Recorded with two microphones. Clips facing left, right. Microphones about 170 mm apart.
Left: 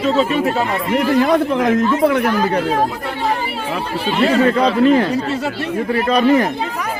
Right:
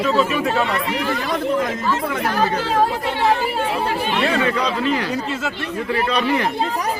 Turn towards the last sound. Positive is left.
turn(degrees=45)  # may be behind; listen again after turning